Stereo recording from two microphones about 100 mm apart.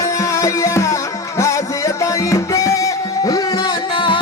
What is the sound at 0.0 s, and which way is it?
Music, 35° left (ahead or behind).